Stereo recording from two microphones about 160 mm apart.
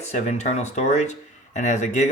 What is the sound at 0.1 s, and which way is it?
Speech, 45° left (ahead or behind).